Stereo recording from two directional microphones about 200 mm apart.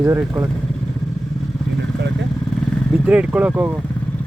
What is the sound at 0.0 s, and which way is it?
Speech, 10° right (ahead or behind).